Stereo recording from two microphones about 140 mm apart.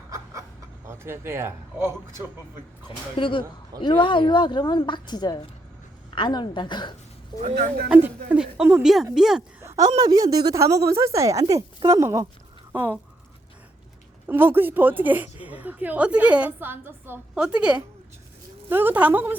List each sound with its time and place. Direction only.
0.9 s a man's voice: 20° right (ahead or behind)
3.2 s a woman's voice: 35° left (ahead or behind)
7.9 s a woman's voice: 10° right (ahead or behind)
9.6 s a sound: 20° right (ahead or behind)
10.0 s a woman's voice: 25° right (ahead or behind)
14.3 s a woman's voice: 15° right (ahead or behind)